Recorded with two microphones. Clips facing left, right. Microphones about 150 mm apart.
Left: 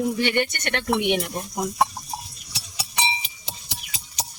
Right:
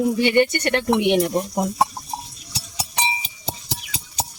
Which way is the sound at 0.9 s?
40° right (ahead or behind).